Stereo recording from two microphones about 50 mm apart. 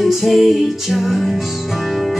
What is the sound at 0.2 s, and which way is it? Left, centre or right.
Music, centre.